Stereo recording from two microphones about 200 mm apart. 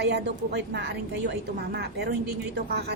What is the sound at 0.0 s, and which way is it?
A woman's voice, 55° right (ahead or behind).